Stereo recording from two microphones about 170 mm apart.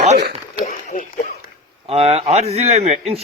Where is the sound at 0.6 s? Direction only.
45° left (ahead or behind).